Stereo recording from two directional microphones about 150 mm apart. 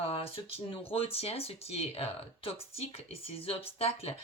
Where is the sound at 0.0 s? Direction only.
40° left (ahead or behind).